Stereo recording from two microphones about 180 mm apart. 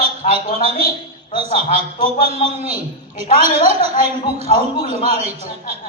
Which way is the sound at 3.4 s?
35° right (ahead or behind).